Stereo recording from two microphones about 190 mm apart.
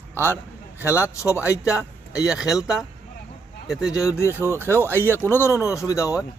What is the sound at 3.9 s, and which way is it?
Speech, 20° left (ahead or behind).